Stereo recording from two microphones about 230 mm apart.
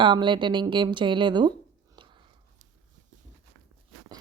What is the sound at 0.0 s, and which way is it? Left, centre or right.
Speech, centre.